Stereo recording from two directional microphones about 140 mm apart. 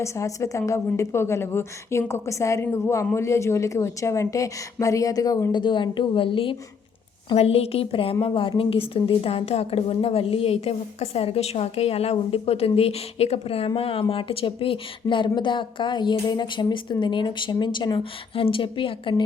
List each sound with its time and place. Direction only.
0.0 s a woman's voice: 20° left (ahead or behind); by 19.2 s 35° left (ahead or behind)